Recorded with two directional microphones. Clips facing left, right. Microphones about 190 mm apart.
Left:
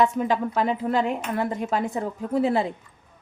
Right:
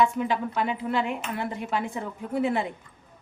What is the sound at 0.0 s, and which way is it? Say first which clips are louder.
A woman's voice: left 2 dB; 40° left (ahead or behind).